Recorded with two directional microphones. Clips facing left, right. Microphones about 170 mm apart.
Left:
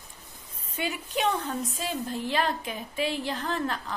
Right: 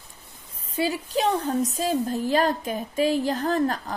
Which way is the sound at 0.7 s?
35° right (ahead or behind).